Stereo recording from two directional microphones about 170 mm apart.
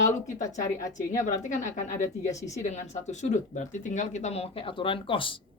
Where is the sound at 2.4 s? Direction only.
45° left (ahead or behind).